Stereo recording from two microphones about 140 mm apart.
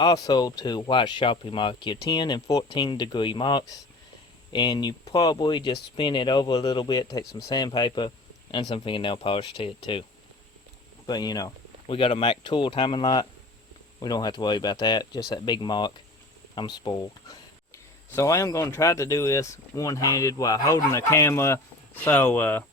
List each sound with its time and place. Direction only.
0.0 s speech: 30° left (ahead or behind)
11.0 s speech: 30° left (ahead or behind)
11.9 s speech: 40° left (ahead or behind); by 22.6 s 10° left (ahead or behind)